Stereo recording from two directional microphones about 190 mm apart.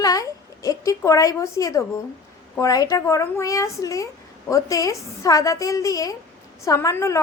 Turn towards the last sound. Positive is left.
turn(degrees=15)  # may be behind; listen again after turning